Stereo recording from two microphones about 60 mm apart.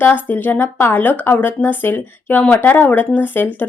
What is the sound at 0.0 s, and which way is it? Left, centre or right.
A woman's voice, left.